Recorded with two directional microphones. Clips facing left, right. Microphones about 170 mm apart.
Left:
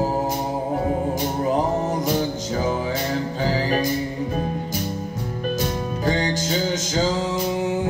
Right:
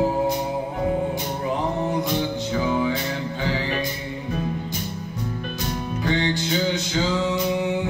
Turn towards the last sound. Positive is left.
turn(degrees=45)  # may be behind; listen again after turning